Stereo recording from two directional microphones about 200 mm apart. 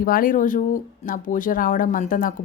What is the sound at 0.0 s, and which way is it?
A woman's voice, 45° left (ahead or behind).